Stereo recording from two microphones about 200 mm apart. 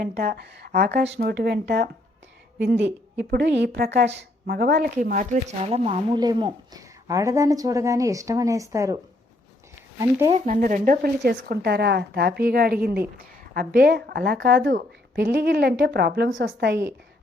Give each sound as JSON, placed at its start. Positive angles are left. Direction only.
{"t": 0.0, "sound": "speech", "side_deg": -50}
{"t": 10.0, "sound": "speech", "side_deg": -15}
{"t": 10.4, "sound": "speech", "side_deg": -40}